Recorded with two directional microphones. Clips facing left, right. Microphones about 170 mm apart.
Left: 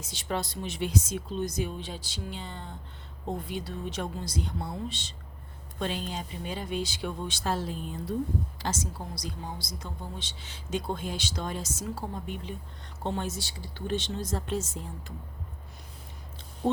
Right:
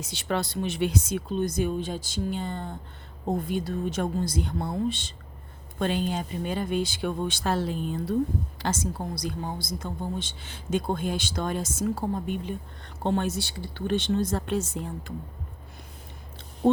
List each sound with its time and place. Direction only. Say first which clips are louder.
0.0 s a woman's voice: right 4 dB; 70° right (ahead or behind)